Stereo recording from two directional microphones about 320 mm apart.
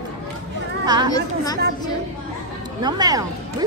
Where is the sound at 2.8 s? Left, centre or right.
Centre.